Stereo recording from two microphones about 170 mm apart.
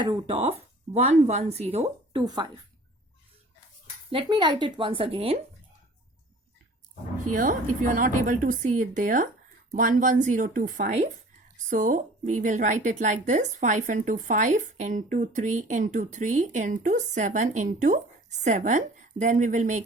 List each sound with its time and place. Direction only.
0.0 s a woman's voice: 30° right (ahead or behind)
2.2 s speech: 25° right (ahead or behind)
4.1 s a woman's voice: 30° right (ahead or behind)
7.3 s a woman's voice: 50° right (ahead or behind)